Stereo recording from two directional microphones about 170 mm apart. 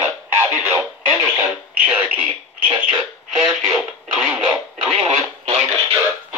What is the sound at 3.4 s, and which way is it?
Radio, 5° right (ahead or behind).